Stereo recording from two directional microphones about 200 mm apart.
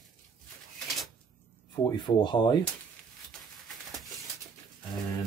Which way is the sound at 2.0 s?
20° left (ahead or behind).